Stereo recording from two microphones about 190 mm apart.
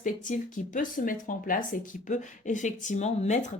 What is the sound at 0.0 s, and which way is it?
Speech, 45° left (ahead or behind).